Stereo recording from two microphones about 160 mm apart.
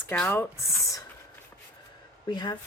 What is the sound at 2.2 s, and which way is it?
Speech, 25° left (ahead or behind).